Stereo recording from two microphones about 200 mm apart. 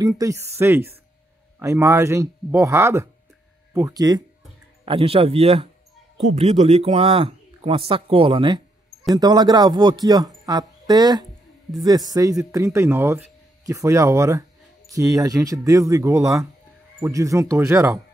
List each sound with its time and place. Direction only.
0.0 s speech: 15° right (ahead or behind)